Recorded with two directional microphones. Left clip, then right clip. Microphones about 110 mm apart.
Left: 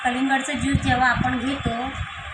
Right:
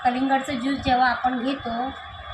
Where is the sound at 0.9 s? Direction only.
20° right (ahead or behind).